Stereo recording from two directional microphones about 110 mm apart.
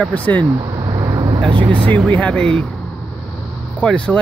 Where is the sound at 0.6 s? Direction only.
40° right (ahead or behind).